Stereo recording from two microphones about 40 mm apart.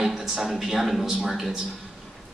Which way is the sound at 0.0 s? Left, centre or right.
Centre.